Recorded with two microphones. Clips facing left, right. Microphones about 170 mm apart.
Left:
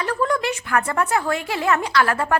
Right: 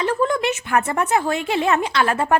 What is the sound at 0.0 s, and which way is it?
A woman's voice, 20° right (ahead or behind).